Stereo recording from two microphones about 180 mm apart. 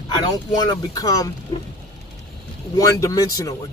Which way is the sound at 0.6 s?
20° left (ahead or behind).